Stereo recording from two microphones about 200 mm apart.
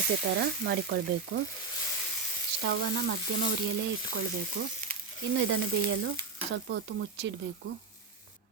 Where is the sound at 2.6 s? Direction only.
65° right (ahead or behind).